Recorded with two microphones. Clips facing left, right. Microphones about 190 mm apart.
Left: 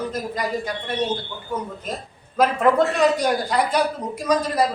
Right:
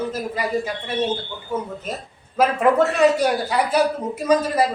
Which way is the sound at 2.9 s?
5° right (ahead or behind).